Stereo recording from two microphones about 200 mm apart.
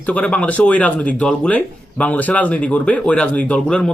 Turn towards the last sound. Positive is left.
turn(degrees=5)  # may be behind; listen again after turning